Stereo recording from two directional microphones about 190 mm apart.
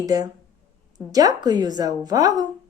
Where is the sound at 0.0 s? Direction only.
20° right (ahead or behind).